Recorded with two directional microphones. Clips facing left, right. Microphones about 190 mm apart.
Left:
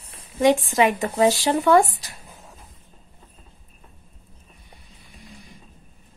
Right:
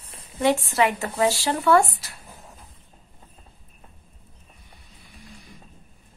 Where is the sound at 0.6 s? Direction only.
15° left (ahead or behind).